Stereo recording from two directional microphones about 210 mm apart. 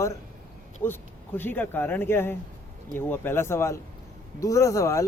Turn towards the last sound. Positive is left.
turn(degrees=15)  # may be behind; listen again after turning